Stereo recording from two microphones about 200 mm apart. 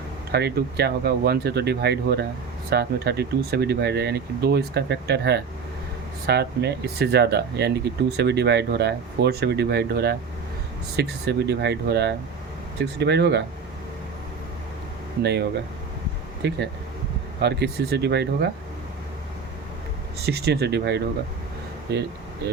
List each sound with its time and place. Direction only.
0.3 s speech: 55° right (ahead or behind)
15.2 s speech: 55° right (ahead or behind)
20.2 s speech: 55° right (ahead or behind)